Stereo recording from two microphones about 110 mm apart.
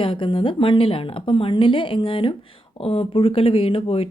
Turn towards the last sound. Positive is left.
turn(degrees=60)  # may be behind; listen again after turning